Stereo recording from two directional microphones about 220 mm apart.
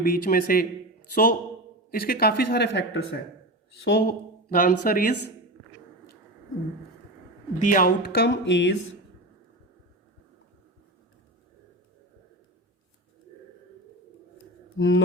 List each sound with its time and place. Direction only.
0.0 s a man's voice: 40° left (ahead or behind)
7.6 s a woman's voice: 40° left (ahead or behind); by 8.7 s 55° left (ahead or behind)
14.8 s mantra: 60° left (ahead or behind)